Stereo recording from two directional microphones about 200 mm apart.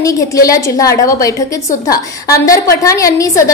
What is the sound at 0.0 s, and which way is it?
A woman's voice, 15° left (ahead or behind).